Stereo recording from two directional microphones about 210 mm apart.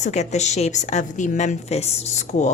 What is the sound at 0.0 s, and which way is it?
A woman's voice, 30° left (ahead or behind).